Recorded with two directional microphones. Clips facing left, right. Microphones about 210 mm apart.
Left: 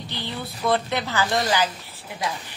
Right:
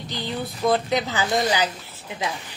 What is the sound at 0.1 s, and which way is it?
Speech, 15° right (ahead or behind).